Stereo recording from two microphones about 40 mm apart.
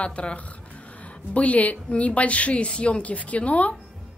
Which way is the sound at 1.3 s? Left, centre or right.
Left.